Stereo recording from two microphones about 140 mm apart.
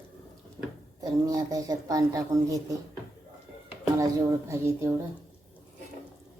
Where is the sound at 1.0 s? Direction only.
25° right (ahead or behind).